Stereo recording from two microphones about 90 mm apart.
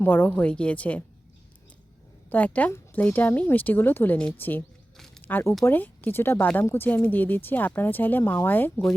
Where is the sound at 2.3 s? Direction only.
15° left (ahead or behind).